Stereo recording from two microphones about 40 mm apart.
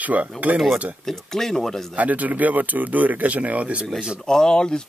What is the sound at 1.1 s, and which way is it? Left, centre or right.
Speech, centre.